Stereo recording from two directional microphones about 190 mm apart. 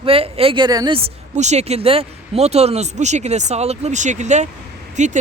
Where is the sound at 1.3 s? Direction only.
35° right (ahead or behind).